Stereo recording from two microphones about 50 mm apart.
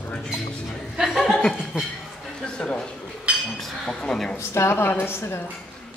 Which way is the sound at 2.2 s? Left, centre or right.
Centre.